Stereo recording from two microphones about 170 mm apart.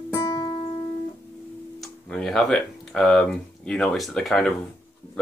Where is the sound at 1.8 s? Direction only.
5° left (ahead or behind).